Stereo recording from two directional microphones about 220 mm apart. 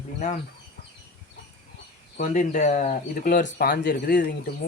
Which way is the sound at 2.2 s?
35° left (ahead or behind).